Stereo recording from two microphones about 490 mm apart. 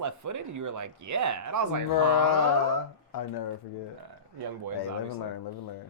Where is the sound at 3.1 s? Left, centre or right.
Left.